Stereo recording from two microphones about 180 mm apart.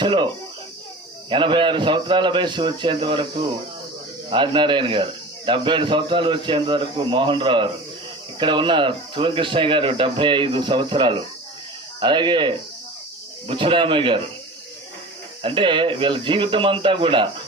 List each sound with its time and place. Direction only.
0.0 s speech: 25° right (ahead or behind)
1.3 s speech: 25° right (ahead or behind)
4.3 s speech: 25° right (ahead or behind)
15.4 s speech: 30° right (ahead or behind)